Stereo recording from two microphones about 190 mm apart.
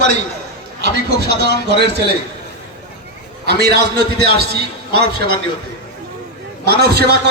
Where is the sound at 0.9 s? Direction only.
55° left (ahead or behind).